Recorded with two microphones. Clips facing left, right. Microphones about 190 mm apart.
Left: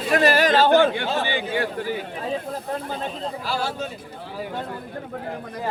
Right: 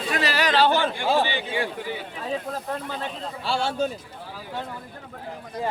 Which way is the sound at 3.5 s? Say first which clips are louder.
Right 4 dB; 25° right (ahead or behind).